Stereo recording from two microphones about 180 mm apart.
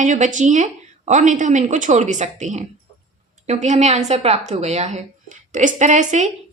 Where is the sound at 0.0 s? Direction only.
45° right (ahead or behind).